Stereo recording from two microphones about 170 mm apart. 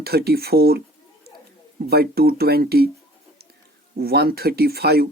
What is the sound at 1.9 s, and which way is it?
Speech, 65° right (ahead or behind).